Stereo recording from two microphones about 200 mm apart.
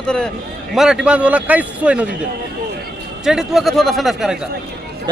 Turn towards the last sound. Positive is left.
turn(degrees=0)  # may be behind; listen again after turning